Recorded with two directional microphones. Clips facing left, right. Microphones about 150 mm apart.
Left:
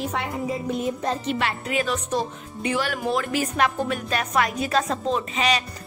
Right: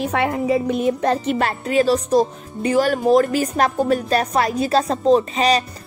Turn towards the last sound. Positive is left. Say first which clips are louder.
# right 7 dB
turn(degrees=-35)  # may be behind; listen again after turning